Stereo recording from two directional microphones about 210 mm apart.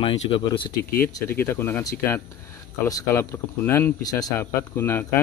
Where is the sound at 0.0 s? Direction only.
25° left (ahead or behind).